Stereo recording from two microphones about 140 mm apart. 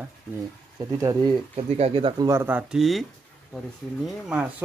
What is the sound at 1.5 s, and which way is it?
Speech, 45° right (ahead or behind).